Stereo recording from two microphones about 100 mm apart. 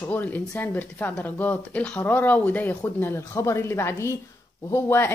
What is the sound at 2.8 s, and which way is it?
Speech, 25° left (ahead or behind).